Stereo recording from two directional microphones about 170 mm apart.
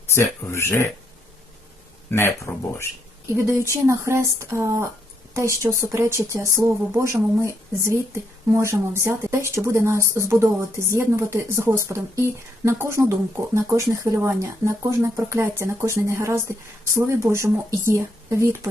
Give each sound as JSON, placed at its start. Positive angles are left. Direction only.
{"t": 0.1, "sound": "speech", "side_deg": 15}
{"t": 2.0, "sound": "speech", "side_deg": 15}
{"t": 3.2, "sound": "speech", "side_deg": -15}